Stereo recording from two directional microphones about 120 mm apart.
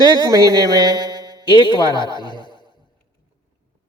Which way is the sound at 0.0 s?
30° right (ahead or behind).